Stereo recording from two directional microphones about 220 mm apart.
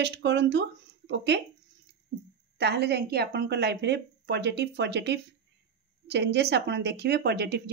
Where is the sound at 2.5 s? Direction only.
50° right (ahead or behind).